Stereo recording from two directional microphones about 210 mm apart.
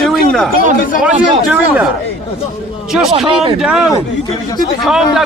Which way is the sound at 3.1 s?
25° right (ahead or behind).